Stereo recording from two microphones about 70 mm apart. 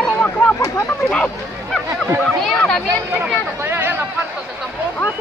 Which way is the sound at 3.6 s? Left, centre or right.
Right.